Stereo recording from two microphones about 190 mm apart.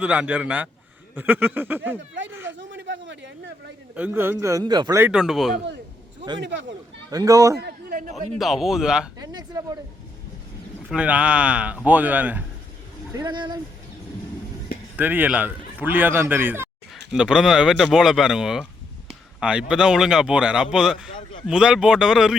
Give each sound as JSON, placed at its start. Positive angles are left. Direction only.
{"t": 0.0, "sound": "speech", "side_deg": -5}
{"t": 2.5, "sound": "a sound", "side_deg": -75}
{"t": 3.9, "sound": "speech", "side_deg": -10}
{"t": 5.0, "sound": "speech", "side_deg": -5}
{"t": 6.4, "sound": "speech", "side_deg": -70}
{"t": 7.1, "sound": "speech", "side_deg": -20}
{"t": 7.6, "sound": "a sound", "side_deg": -45}
{"t": 8.4, "sound": "speech", "side_deg": 0}
{"t": 9.1, "sound": "speech", "side_deg": -20}
{"t": 10.8, "sound": "speech", "side_deg": -5}
{"t": 13.1, "sound": "speech", "side_deg": -25}
{"t": 14.9, "sound": "speech", "side_deg": -10}